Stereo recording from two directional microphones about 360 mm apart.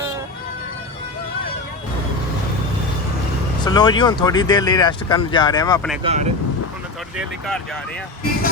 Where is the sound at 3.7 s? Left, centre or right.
Centre.